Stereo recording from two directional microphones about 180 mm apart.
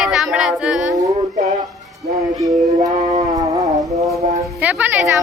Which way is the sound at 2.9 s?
35° right (ahead or behind).